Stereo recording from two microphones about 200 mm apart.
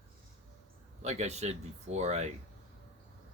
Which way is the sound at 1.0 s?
35° right (ahead or behind).